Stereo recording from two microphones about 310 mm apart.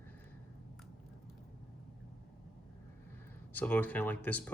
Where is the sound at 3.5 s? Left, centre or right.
Centre.